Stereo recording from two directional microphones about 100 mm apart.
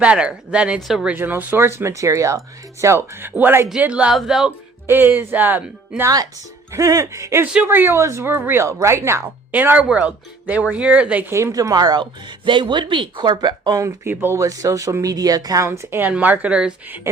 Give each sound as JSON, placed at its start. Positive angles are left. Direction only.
{"t": 0.0, "sound": "speech", "side_deg": -10}
{"t": 1.1, "sound": "a woman's voice", "side_deg": -20}
{"t": 4.9, "sound": "a woman's voice", "side_deg": -20}
{"t": 6.7, "sound": "a woman's voice", "side_deg": -35}
{"t": 11.5, "sound": "speech", "side_deg": -40}
{"t": 12.5, "sound": "speech", "side_deg": -55}
{"t": 13.8, "sound": "a woman's voice", "side_deg": -20}
{"t": 14.3, "sound": "a woman's voice", "side_deg": -30}